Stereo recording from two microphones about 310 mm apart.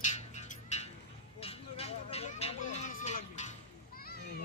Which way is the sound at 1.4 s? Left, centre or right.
Centre.